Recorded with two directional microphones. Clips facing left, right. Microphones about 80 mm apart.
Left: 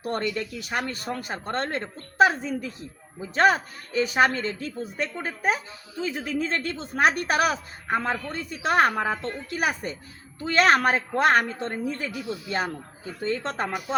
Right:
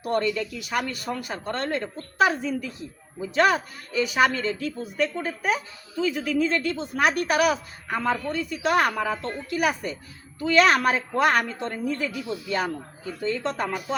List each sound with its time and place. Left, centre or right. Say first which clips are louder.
0.0 s a man's voice: right 3 dB; left